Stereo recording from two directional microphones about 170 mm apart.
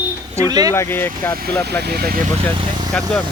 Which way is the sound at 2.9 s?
10° left (ahead or behind).